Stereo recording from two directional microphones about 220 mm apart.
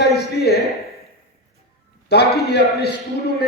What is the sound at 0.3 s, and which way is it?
Speech, 45° left (ahead or behind).